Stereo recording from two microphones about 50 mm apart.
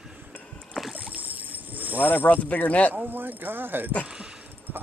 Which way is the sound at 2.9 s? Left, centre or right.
Right.